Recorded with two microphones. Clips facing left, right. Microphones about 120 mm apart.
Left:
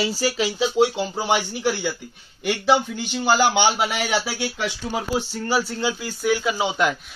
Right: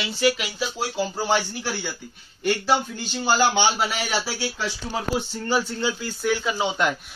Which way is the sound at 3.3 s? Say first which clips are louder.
Left 1 dB; 15° left (ahead or behind).